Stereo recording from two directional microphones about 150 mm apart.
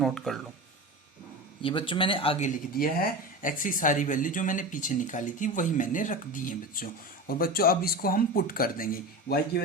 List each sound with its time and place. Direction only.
0.0 s speech: centre (ahead or behind)
1.6 s speech: 35° left (ahead or behind)
2.7 s speech: 75° left (ahead or behind); by 6.8 s 60° left (ahead or behind)
7.3 s speech: 80° left